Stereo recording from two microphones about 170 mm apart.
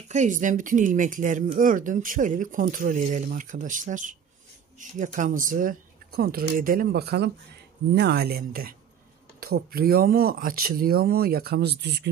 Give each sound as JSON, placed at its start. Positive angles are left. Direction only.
{"t": 0.1, "sound": "speech", "side_deg": -45}